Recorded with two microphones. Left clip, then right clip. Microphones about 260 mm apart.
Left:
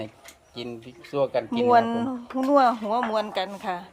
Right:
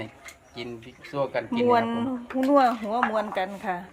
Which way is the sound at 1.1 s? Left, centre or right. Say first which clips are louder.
Left 3 dB; left.